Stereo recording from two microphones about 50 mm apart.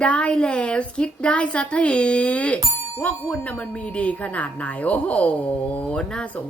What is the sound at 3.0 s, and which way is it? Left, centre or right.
Ding, left.